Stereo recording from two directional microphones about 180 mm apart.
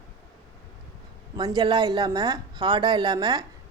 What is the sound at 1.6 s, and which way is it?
A woman's voice, 20° right (ahead or behind).